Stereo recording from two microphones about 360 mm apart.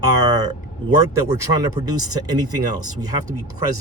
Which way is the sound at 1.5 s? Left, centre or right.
Centre.